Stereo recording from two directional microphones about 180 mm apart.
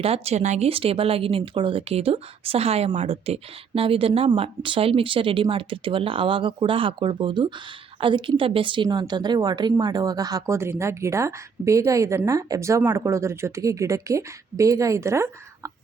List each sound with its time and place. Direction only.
0.0 s a woman's voice: 35° right (ahead or behind); by 15.7 s 15° right (ahead or behind)